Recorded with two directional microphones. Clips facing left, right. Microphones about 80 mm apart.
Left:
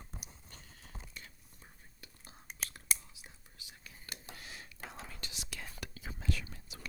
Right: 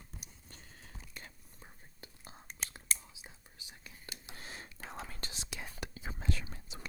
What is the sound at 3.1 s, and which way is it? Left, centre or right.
Whispering, right.